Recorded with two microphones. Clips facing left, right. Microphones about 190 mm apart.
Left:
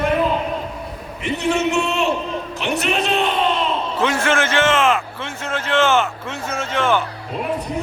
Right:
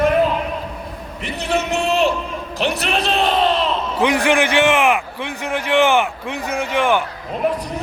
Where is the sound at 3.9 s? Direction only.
15° right (ahead or behind).